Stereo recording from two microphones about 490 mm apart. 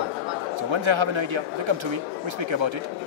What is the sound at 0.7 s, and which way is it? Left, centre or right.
Speech, right.